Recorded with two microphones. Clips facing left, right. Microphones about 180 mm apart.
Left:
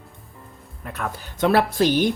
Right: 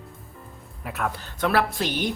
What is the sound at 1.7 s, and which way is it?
Speech, 40° left (ahead or behind).